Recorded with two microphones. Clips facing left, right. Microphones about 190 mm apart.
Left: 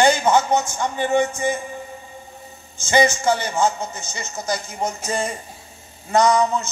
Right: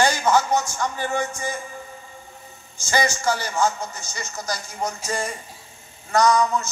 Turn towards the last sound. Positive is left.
turn(degrees=25)  # may be behind; listen again after turning